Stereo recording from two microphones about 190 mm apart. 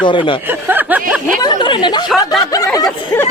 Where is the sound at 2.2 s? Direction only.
20° left (ahead or behind).